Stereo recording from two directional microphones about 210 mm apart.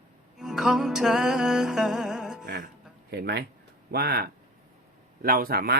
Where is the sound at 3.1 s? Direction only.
50° right (ahead or behind).